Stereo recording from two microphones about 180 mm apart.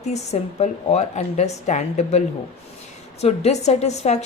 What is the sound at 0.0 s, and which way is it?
Speech, 40° left (ahead or behind).